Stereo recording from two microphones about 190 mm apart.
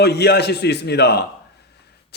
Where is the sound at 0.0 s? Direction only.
60° left (ahead or behind).